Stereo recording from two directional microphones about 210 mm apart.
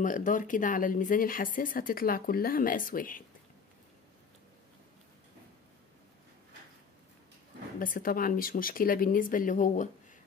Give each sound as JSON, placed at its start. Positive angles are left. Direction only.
{"t": 0.0, "sound": "speech", "side_deg": 40}
{"t": 7.8, "sound": "speech", "side_deg": 40}